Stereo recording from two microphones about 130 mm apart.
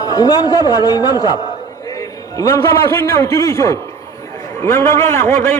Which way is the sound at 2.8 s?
20° left (ahead or behind).